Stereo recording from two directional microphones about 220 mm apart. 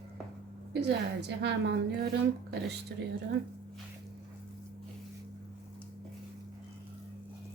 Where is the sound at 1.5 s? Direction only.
50° right (ahead or behind).